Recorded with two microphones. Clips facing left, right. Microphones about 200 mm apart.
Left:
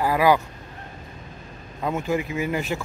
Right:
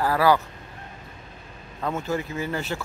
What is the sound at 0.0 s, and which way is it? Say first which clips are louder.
Vehicle: left 1 dB; 15° left (ahead or behind).